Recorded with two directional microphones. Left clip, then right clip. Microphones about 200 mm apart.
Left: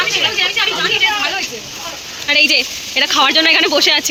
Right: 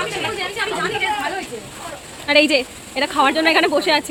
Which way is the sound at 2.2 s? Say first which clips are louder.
Left 3 dB; 20° right (ahead or behind).